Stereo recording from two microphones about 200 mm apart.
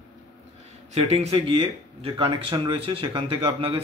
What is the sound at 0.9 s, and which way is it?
Speech, 30° right (ahead or behind).